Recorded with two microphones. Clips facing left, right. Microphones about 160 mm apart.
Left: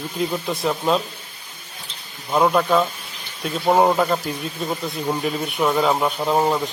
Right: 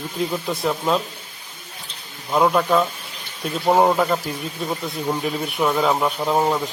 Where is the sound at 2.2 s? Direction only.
Centre (ahead or behind).